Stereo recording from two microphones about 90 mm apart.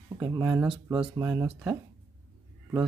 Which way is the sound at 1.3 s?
10° right (ahead or behind).